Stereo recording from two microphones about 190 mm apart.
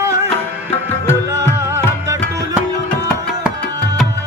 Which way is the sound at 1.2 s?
15° right (ahead or behind).